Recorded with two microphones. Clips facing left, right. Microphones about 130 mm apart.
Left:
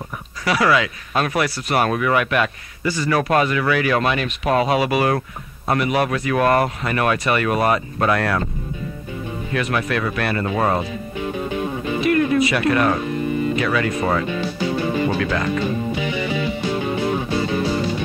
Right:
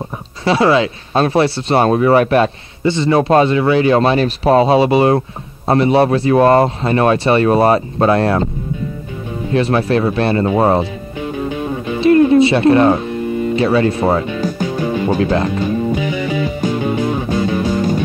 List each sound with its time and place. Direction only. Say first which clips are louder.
0.5 s speech: right 6 dB; 25° right (ahead or behind)
9.5 s speech: right 8 dB; 30° right (ahead or behind)
12.0 s speech: right 9 dB; 30° right (ahead or behind)
14.4 s music: right 3 dB; 45° right (ahead or behind)
15.2 s speech: right 5 dB; 35° right (ahead or behind)
16.6 s music: right 6 dB; 45° right (ahead or behind)